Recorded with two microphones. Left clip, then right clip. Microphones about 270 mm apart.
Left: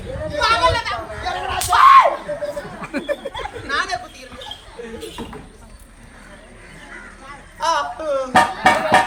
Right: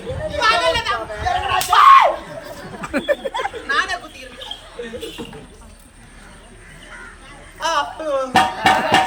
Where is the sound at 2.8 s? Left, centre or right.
Centre.